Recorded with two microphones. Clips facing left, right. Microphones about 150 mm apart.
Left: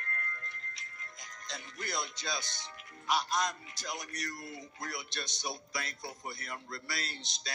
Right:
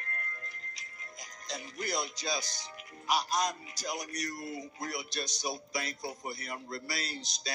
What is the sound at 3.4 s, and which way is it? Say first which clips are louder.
A man's voice: right 2 dB; 20° right (ahead or behind).